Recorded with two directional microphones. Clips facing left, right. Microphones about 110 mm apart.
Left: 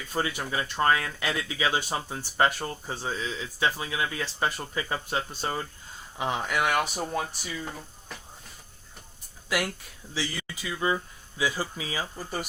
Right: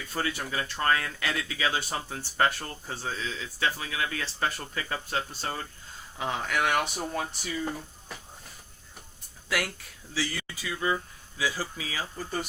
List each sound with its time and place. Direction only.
0.1 s speech: 15° left (ahead or behind)
10.2 s speech: 15° left (ahead or behind)